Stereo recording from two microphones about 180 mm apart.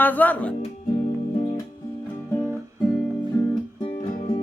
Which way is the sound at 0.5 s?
40° left (ahead or behind).